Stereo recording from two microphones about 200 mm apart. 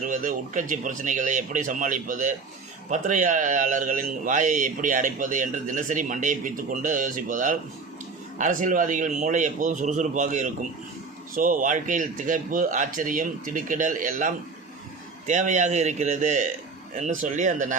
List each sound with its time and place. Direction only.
0.0 s a man's voice: 40° right (ahead or behind)